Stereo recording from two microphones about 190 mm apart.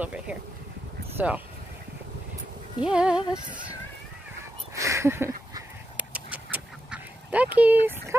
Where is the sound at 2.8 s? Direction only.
5° right (ahead or behind).